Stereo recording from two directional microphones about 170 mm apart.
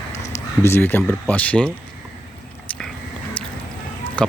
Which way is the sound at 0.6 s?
15° left (ahead or behind).